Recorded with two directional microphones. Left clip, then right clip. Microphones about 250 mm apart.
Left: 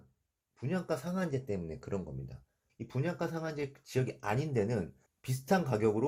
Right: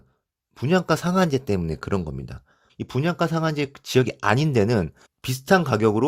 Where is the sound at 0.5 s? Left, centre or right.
Right.